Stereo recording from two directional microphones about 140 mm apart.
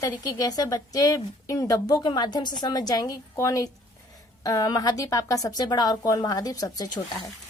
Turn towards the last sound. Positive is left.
turn(degrees=30)  # may be behind; listen again after turning